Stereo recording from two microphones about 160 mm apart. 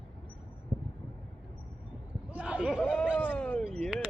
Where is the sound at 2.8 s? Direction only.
5° left (ahead or behind).